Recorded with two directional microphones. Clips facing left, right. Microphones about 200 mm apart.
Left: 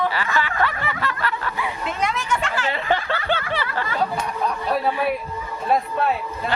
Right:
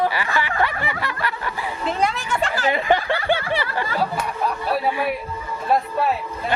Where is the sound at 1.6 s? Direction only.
35° right (ahead or behind).